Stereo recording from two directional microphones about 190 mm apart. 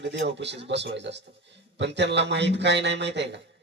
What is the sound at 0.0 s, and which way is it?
A man's voice, 65° right (ahead or behind).